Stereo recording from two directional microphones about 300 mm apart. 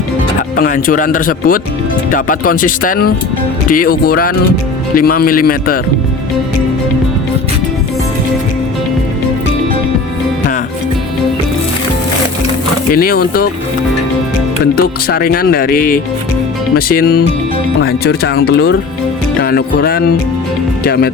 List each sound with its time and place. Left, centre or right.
0.5 s speech: left
12.9 s speech: left
14.8 s speech: left